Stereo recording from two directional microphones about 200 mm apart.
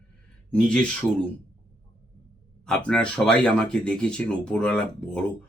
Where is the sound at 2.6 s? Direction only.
5° left (ahead or behind).